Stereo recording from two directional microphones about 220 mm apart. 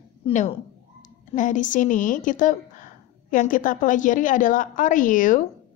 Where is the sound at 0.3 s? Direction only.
35° left (ahead or behind).